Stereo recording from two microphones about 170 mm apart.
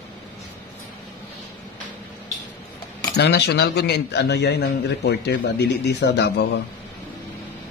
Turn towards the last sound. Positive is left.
turn(degrees=85)